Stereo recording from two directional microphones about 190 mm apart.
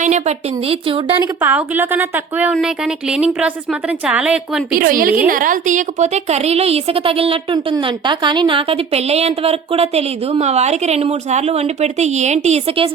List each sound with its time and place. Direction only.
0.0 s a woman's voice: 35° right (ahead or behind)
1.4 s a woman's voice: 10° right (ahead or behind)
4.7 s a woman's voice: 50° right (ahead or behind); by 12.9 s 30° right (ahead or behind)